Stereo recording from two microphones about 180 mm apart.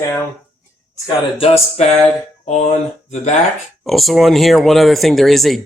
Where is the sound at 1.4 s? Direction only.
35° left (ahead or behind).